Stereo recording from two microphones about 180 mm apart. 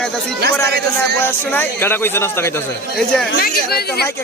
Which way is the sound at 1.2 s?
10° left (ahead or behind).